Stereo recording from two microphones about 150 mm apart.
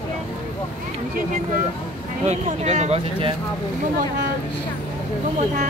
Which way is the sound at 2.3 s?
50° right (ahead or behind).